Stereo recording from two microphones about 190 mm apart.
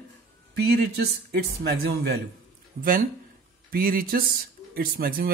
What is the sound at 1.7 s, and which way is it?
A man's voice, 55° right (ahead or behind).